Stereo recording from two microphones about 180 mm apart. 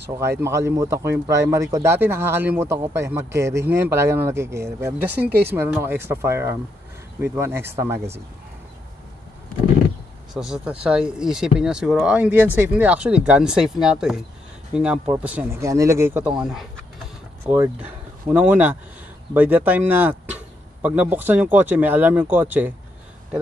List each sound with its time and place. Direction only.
0.0 s speech: 15° right (ahead or behind)
5.1 s speech: 60° right (ahead or behind)
5.4 s speech: 10° right (ahead or behind)
10.3 s speech: 5° right (ahead or behind)